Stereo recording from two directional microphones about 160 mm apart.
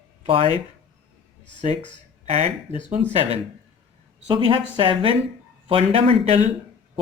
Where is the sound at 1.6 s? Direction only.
45° right (ahead or behind).